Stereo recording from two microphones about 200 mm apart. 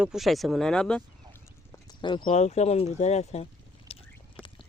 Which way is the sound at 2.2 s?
35° left (ahead or behind).